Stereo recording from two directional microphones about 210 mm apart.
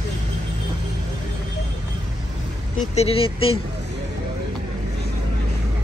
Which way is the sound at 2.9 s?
30° left (ahead or behind).